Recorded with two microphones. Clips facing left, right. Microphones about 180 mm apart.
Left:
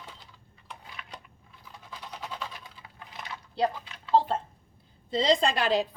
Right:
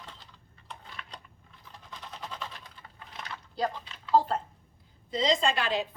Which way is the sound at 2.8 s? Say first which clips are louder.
Right 1 dB; 5° left (ahead or behind).